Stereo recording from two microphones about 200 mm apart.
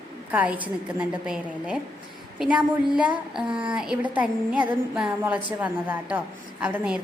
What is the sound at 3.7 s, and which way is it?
A woman's voice, 5° right (ahead or behind).